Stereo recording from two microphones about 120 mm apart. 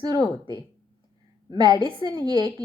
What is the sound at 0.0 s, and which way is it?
A woman's voice, 35° right (ahead or behind).